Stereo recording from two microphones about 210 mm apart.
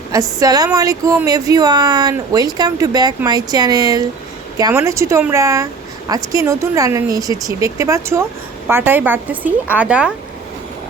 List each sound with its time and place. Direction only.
0.1 s a woman's voice: 15° right (ahead or behind)